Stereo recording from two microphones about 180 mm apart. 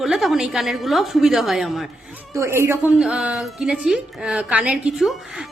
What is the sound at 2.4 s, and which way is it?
Speech, 15° right (ahead or behind).